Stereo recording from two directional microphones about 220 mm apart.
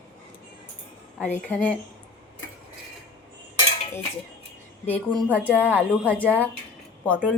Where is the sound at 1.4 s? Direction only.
5° left (ahead or behind).